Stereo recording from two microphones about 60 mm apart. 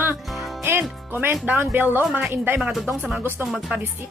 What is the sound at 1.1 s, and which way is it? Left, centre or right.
Speech, right.